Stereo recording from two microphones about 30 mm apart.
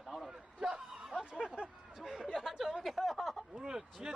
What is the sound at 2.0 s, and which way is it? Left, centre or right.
Speech, centre.